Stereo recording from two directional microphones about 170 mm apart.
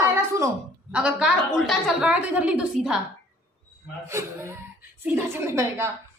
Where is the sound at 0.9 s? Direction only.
5° right (ahead or behind).